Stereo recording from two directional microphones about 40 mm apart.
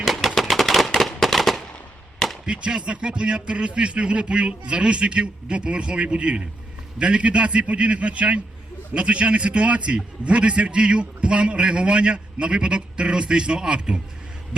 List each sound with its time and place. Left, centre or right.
0.0 s gunshot: centre
0.9 s a sound: centre
2.5 s a man's voice: right